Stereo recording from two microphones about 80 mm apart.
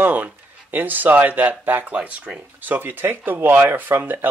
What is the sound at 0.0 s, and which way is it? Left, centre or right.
Speech, right.